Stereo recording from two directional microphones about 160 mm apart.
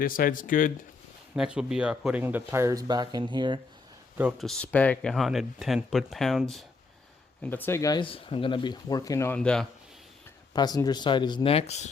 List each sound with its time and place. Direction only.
0.0 s speech: 60° left (ahead or behind)
1.4 s speech: 5° right (ahead or behind); by 3.6 s 30° right (ahead or behind)
4.2 s speech: 5° right (ahead or behind)
7.4 s speech: 10° left (ahead or behind)
8.0 s speech: 35° left (ahead or behind); by 9.6 s 5° left (ahead or behind)
10.5 s speech: 25° left (ahead or behind); by 11.9 s 45° left (ahead or behind)